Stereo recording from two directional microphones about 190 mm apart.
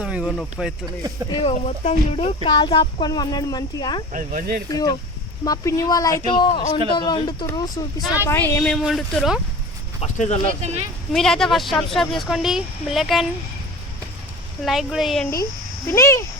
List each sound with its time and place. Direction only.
0.0 s speech: 5° right (ahead or behind)
1.3 s speech: 30° left (ahead or behind)
4.1 s speech: 45° right (ahead or behind)
4.7 s speech: 20° left (ahead or behind)
8.7 s speech: centre (ahead or behind)
10.0 s speech: 40° left (ahead or behind)
11.1 s speech: centre (ahead or behind)
14.6 s speech: centre (ahead or behind)
15.9 s speech: 15° left (ahead or behind)